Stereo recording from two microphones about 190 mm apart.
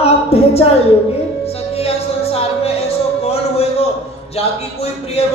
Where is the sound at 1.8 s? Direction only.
30° left (ahead or behind).